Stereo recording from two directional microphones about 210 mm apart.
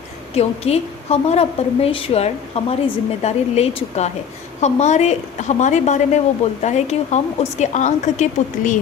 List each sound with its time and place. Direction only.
0.3 s a woman's voice: 30° left (ahead or behind)